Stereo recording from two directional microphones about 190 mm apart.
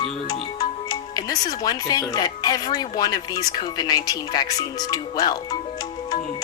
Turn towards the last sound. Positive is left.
turn(degrees=20)  # may be behind; listen again after turning